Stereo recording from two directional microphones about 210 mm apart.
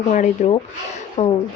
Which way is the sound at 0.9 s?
30° left (ahead or behind).